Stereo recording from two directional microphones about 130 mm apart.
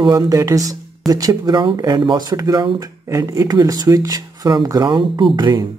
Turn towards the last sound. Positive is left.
turn(degrees=-35)  # may be behind; listen again after turning